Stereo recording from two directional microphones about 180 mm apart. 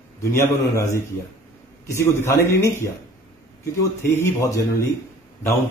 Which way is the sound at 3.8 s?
15° left (ahead or behind).